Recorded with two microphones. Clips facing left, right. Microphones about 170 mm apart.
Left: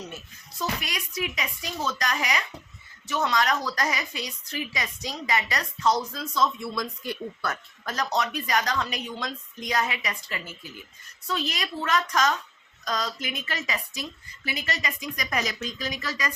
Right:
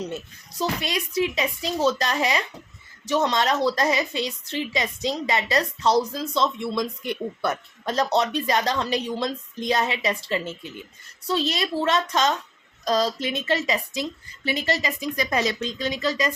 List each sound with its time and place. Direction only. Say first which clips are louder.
0.6 s a woman's voice: right 5 dB; 30° right (ahead or behind)